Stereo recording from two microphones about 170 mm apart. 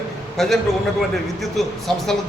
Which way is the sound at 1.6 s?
Centre (ahead or behind).